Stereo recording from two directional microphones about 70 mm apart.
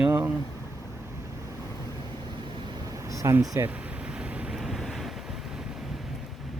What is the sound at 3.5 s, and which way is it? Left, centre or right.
Speech, right.